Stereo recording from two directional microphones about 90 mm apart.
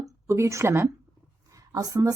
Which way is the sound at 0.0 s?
35° right (ahead or behind).